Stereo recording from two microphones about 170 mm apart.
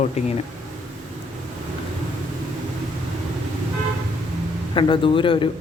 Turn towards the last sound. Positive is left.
turn(degrees=30)  # may be behind; listen again after turning